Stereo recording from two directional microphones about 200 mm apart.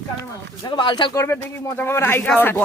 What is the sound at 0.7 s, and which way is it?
Speech, 20° left (ahead or behind).